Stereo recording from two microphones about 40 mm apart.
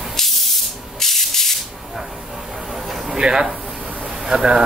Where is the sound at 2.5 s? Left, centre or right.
Centre.